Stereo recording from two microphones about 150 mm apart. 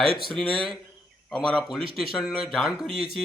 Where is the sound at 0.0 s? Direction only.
40° right (ahead or behind).